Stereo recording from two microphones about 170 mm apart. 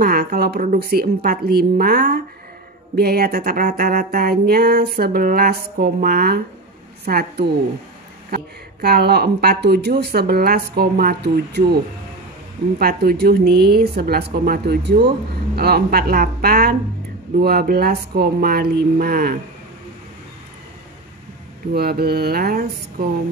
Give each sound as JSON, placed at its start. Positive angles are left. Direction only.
{"t": 0.0, "sound": "music", "side_deg": -60}
{"t": 8.8, "sound": "a woman's voice", "side_deg": -70}
{"t": 12.7, "sound": "a woman's voice", "side_deg": -65}
{"t": 15.5, "sound": "music", "side_deg": -70}
{"t": 21.7, "sound": "music", "side_deg": -65}